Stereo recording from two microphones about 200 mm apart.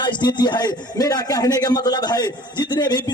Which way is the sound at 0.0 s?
20° left (ahead or behind).